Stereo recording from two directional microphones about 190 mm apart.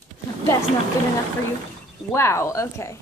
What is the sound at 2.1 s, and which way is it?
Speech, 15° left (ahead or behind).